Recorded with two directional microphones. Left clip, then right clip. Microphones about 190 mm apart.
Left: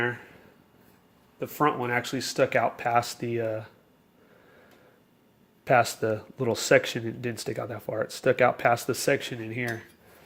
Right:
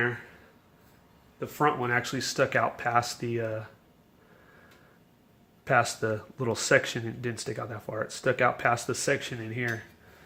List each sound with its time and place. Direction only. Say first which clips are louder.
1.4 s speech: left 1 dB; 30° left (ahead or behind)
5.6 s speech: left 3 dB; 25° left (ahead or behind)